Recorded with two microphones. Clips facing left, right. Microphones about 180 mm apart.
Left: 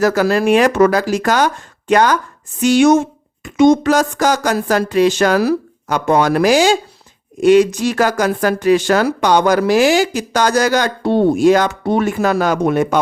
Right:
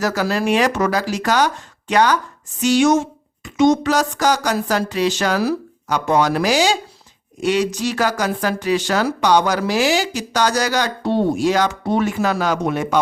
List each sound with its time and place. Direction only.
0.0 s a woman's voice: 55° left (ahead or behind)